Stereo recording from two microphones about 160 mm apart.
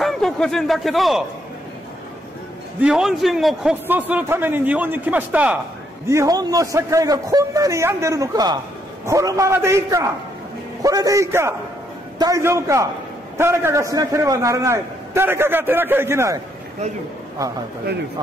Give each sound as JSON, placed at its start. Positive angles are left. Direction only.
{"t": 0.0, "sound": "a man's voice", "side_deg": 0}
{"t": 2.8, "sound": "a man's voice", "side_deg": -5}
{"t": 3.8, "sound": "a man's voice", "side_deg": -10}
{"t": 6.0, "sound": "a man's voice", "side_deg": -20}